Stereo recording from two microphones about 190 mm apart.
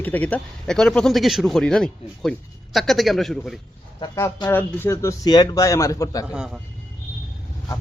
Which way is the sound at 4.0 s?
20° left (ahead or behind).